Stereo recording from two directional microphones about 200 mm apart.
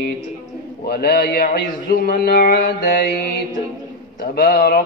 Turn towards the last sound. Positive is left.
turn(degrees=50)  # may be behind; listen again after turning